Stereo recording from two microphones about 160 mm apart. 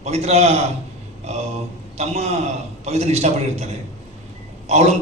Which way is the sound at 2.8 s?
40° right (ahead or behind).